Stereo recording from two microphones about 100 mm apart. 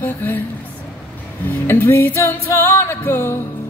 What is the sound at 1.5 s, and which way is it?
Music, 20° left (ahead or behind).